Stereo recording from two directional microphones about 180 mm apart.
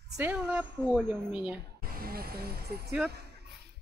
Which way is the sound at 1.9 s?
55° right (ahead or behind).